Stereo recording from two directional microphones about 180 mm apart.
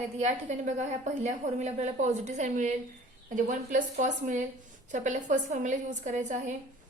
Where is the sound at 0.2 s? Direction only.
40° right (ahead or behind).